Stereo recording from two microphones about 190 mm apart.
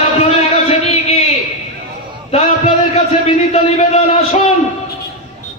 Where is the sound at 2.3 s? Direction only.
35° left (ahead or behind).